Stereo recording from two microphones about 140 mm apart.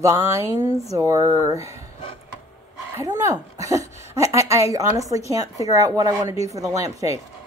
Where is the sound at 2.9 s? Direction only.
25° right (ahead or behind).